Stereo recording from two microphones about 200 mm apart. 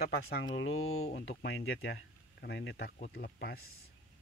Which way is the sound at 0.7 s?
90° left.